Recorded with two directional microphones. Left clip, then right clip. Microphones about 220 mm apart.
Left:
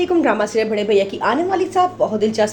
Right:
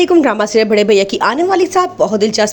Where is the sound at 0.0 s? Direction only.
35° right (ahead or behind).